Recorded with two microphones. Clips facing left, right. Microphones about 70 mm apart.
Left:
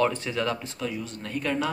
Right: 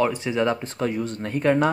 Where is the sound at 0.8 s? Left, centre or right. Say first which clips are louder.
Right 7 dB; right.